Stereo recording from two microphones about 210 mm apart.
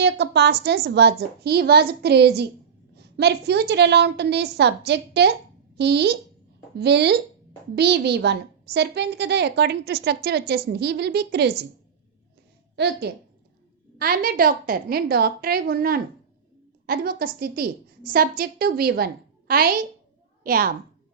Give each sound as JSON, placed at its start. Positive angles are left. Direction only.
{"t": 0.0, "sound": "a woman's voice", "side_deg": -55}
{"t": 12.7, "sound": "a woman's voice", "side_deg": -50}